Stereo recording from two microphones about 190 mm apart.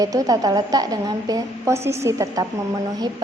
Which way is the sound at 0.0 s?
20° right (ahead or behind).